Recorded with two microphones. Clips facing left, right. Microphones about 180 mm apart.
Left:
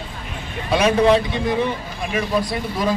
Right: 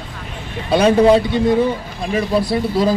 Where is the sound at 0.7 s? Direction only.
35° right (ahead or behind).